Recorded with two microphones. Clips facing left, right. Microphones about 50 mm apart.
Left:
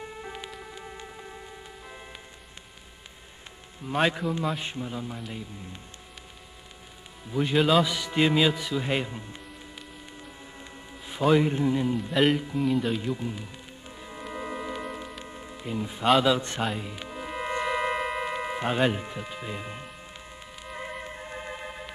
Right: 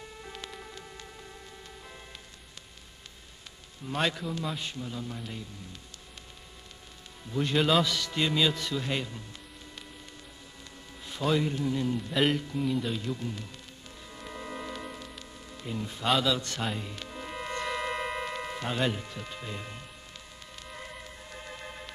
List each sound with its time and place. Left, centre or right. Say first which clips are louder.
0.0 s music: left 5 dB; left
3.8 s a man's voice: left 5 dB; centre
7.2 s a man's voice: left 3 dB; centre
7.8 s a man's voice: left 5 dB; centre
10.6 s music: left 1 dB; left
12.1 s music: left 4 dB; centre
12.4 s a man's voice: left 3 dB; centre
12.6 s music: left 6 dB; centre; by 15.5 s left
15.5 s a man's voice: left 3 dB; centre
16.6 s music: left 3 dB; centre